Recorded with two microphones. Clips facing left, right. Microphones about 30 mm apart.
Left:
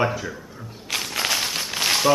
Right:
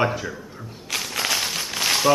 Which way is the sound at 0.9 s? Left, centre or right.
Centre.